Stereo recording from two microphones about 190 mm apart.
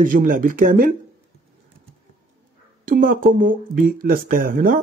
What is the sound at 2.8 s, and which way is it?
Speech, 50° right (ahead or behind).